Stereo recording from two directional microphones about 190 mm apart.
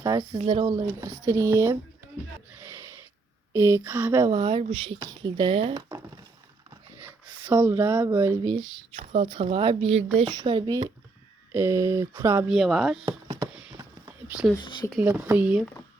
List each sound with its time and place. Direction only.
0.0 s a sound: 20° right (ahead or behind)
0.4 s speech: 20° right (ahead or behind)
3.5 s speech: 15° right (ahead or behind)
4.2 s speech: 25° right (ahead or behind)
6.7 s a sound: 20° right (ahead or behind)
7.5 s speech: 10° right (ahead or behind)
12.5 s speech: centre (ahead or behind)
13.1 s a sound: 25° right (ahead or behind)
14.5 s speech: 25° left (ahead or behind)
15.0 s speech: 10° right (ahead or behind)